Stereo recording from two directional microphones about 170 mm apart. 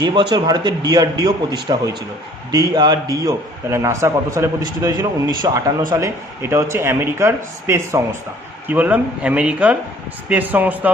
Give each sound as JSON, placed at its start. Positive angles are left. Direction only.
{"t": 0.0, "sound": "a man's voice", "side_deg": -25}